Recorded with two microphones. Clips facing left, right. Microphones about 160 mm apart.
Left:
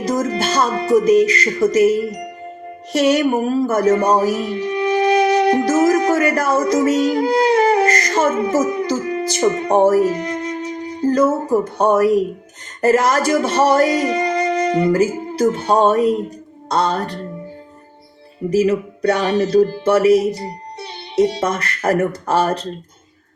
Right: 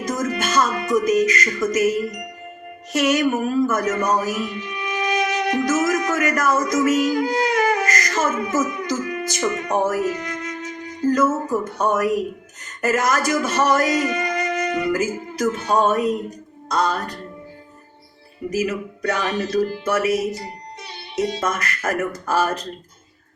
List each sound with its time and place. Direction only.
0.0 s speech: 30° left (ahead or behind)
18.5 s speech: 30° left (ahead or behind)